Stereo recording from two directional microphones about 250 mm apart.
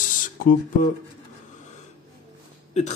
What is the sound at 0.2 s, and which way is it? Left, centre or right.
Speech, left.